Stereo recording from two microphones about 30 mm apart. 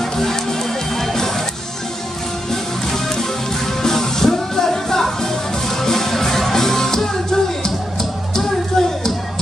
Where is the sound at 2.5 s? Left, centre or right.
Centre.